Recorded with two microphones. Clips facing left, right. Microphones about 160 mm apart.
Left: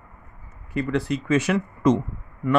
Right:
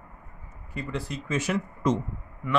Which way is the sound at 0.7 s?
75° left (ahead or behind).